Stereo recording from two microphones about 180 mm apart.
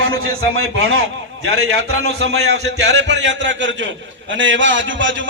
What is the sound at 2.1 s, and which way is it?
A man's voice, 75° right (ahead or behind).